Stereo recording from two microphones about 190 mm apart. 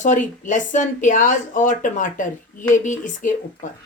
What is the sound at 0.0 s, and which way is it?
Speech, 40° left (ahead or behind).